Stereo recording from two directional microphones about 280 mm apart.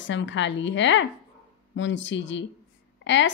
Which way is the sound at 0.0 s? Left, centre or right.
Left.